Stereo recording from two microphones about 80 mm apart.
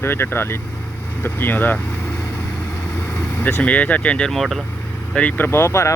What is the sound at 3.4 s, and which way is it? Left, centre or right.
Speech, left.